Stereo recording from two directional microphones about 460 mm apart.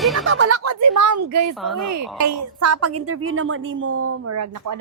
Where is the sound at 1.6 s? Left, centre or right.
Centre.